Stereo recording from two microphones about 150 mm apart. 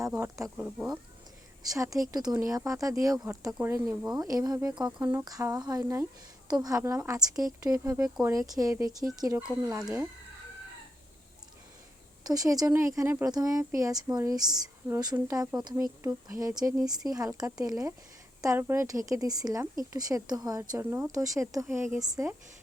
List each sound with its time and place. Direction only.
0.1 s speech: 20° right (ahead or behind)
0.5 s speech: 10° right (ahead or behind)
1.7 s speech: 25° right (ahead or behind)
7.9 s speech: 5° right (ahead or behind)
8.2 s speech: 20° right (ahead or behind)
9.7 s speech: 5° right (ahead or behind)
12.2 s speech: 25° right (ahead or behind)